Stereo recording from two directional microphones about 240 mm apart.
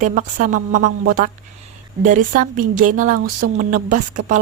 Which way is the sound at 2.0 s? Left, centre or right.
Right.